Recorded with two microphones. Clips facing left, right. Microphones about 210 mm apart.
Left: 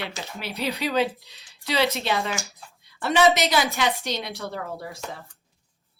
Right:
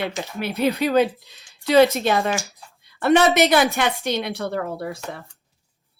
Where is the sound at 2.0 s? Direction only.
50° right (ahead or behind).